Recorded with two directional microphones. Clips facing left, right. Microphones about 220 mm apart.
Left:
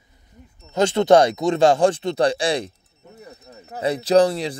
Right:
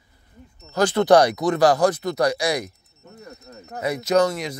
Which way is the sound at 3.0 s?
10° left (ahead or behind).